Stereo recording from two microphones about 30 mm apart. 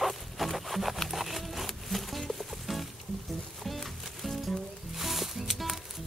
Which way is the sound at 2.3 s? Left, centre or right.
Centre.